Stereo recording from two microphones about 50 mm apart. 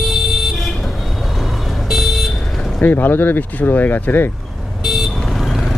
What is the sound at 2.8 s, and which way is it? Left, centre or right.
Speech, left.